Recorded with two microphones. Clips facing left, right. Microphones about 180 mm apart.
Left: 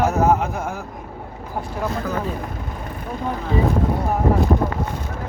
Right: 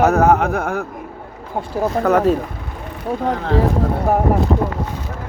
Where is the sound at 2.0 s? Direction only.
75° right (ahead or behind).